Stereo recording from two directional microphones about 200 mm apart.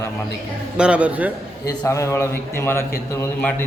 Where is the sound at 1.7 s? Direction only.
15° left (ahead or behind).